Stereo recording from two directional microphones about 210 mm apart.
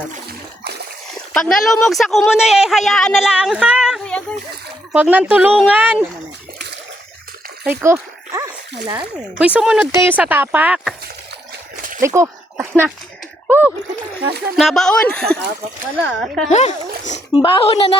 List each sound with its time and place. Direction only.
0.1 s water: 50° right (ahead or behind)
1.3 s speech: centre (ahead or behind)
7.6 s splash: 10° right (ahead or behind)
9.4 s speech: 5° right (ahead or behind)
11.9 s a sound: 15° right (ahead or behind)
13.5 s splash: 5° right (ahead or behind)
14.6 s speech: centre (ahead or behind)
16.5 s speech: 35° left (ahead or behind)